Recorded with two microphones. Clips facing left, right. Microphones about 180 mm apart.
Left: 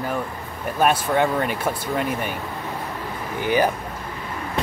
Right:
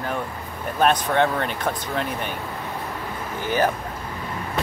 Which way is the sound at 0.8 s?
5° left (ahead or behind).